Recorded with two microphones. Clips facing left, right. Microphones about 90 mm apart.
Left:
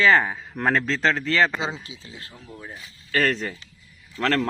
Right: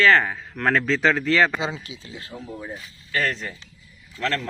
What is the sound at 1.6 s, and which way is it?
Speech, 25° left (ahead or behind).